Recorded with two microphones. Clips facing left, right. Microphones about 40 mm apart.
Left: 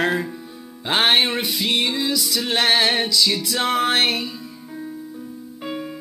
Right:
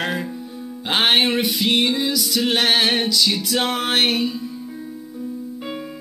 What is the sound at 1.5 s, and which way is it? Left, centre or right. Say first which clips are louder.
Music: right 2 dB; right.